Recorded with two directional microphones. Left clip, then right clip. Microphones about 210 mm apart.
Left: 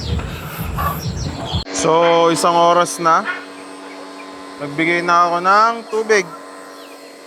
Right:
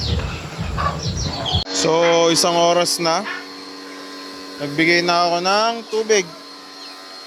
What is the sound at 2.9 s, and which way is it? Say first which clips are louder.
Speech: left 3 dB; 20° right (ahead or behind).